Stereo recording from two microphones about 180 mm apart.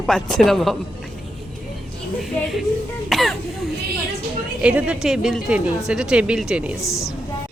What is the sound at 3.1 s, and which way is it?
Throat clearing, centre (ahead or behind).